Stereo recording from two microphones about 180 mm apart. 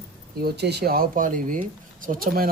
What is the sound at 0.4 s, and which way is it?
Speech, 65° right (ahead or behind).